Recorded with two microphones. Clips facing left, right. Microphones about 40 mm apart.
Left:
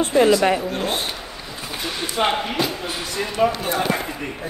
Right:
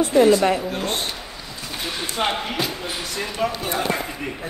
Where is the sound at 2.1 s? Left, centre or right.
Centre.